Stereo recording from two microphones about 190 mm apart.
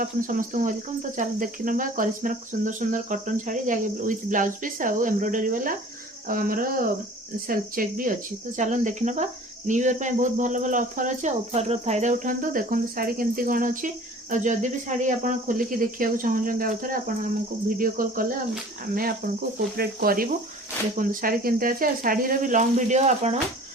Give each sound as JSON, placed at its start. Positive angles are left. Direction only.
{"t": 0.0, "sound": "speech", "side_deg": -45}
{"t": 19.7, "sound": "speech", "side_deg": -55}